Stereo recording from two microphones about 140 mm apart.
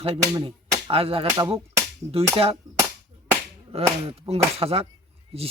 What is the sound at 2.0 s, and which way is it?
Cap gun, 15° right (ahead or behind).